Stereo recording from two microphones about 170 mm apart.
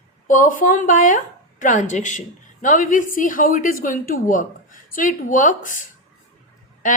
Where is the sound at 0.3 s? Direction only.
50° left (ahead or behind).